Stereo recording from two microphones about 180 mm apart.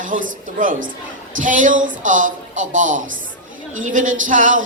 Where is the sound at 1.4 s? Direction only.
45° right (ahead or behind).